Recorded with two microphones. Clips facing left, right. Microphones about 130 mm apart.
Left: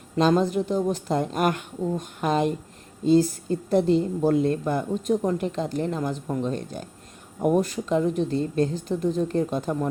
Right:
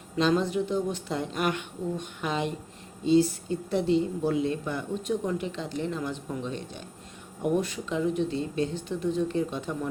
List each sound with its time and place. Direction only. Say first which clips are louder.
0.2 s a woman's voice: left 4 dB; 40° left (ahead or behind)